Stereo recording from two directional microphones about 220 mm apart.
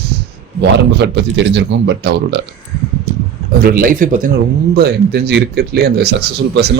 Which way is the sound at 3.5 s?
40° right (ahead or behind).